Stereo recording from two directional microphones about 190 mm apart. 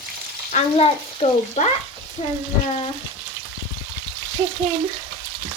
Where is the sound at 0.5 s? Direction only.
35° left (ahead or behind).